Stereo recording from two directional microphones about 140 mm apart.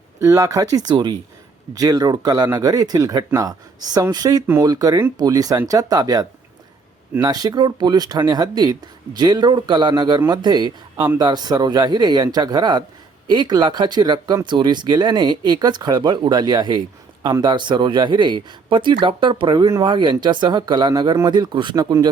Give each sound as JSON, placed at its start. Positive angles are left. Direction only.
{"t": 0.2, "sound": "speech", "side_deg": -25}